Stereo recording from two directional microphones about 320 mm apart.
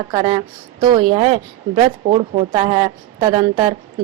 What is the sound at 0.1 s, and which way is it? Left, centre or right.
A woman's voice, centre.